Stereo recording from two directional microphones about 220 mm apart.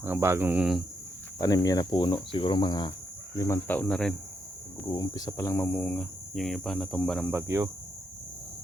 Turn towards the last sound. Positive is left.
turn(degrees=-10)  # may be behind; listen again after turning